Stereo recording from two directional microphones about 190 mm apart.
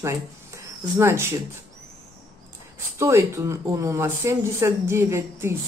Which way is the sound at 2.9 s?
15° right (ahead or behind).